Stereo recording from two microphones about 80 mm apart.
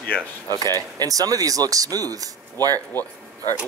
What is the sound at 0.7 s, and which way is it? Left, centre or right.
Speech, right.